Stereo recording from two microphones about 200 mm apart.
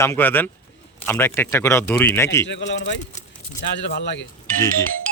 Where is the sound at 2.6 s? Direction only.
60° left (ahead or behind).